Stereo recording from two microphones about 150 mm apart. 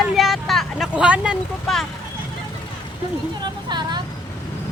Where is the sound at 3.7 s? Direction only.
30° right (ahead or behind).